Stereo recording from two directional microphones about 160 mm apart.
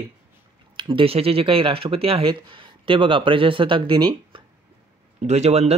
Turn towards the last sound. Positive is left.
turn(degrees=-40)  # may be behind; listen again after turning